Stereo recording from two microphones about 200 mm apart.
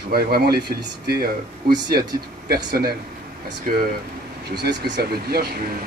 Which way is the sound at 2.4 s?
50° right (ahead or behind).